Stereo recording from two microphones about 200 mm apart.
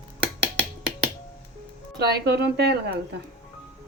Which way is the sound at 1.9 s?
55° right (ahead or behind).